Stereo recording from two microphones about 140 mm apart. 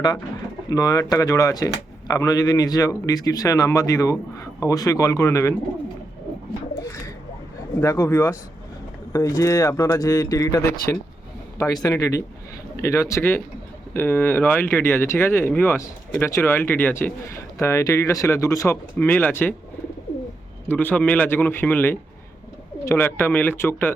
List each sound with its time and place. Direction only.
0.7 s speech: 25° left (ahead or behind)
7.8 s speech: 20° left (ahead or behind)
20.7 s speech: 10° left (ahead or behind)